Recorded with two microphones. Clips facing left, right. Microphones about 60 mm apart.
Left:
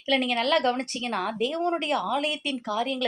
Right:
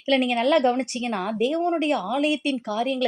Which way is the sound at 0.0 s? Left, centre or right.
Centre.